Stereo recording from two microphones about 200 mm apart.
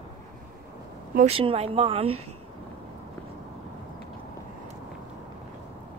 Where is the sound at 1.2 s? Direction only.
30° right (ahead or behind).